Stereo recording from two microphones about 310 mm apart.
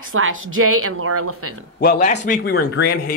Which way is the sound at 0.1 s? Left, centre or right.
Right.